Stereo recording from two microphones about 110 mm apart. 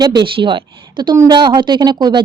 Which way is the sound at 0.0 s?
40° right (ahead or behind).